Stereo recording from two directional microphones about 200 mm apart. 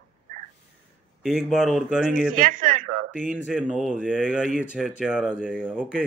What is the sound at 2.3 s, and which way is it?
Speech, 40° right (ahead or behind).